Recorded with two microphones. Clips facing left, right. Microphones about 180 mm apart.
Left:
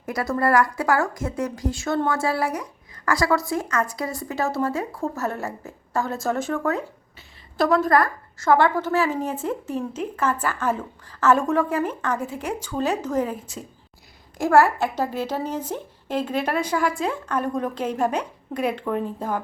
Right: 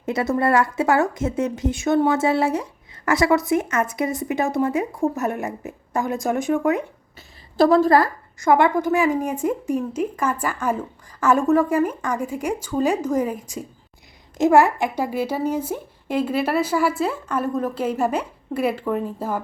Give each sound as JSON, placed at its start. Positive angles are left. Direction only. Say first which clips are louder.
{"t": 0.0, "sound": "a woman's voice", "louder": "right 3 dB", "side_deg": -25}
{"t": 7.5, "sound": "a woman's voice", "louder": "right 4 dB", "side_deg": -30}
{"t": 8.4, "sound": "a woman's voice", "louder": "right 2 dB", "side_deg": -15}